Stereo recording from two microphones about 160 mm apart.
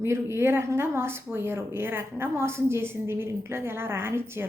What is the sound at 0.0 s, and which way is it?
Speech, 15° right (ahead or behind).